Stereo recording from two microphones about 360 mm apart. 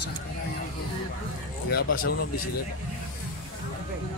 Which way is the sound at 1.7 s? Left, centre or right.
Left.